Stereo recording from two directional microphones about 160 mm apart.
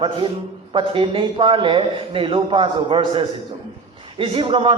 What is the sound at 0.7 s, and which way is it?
A man's voice, 30° right (ahead or behind).